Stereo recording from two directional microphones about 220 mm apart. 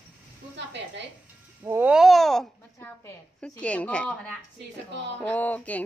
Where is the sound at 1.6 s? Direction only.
10° right (ahead or behind).